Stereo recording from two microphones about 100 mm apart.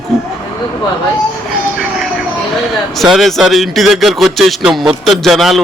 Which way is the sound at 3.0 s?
Centre (ahead or behind).